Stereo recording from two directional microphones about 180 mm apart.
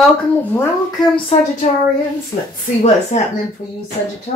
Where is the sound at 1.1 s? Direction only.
35° left (ahead or behind).